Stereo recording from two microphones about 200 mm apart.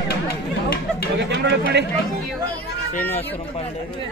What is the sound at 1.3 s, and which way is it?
Chatter, 55° right (ahead or behind).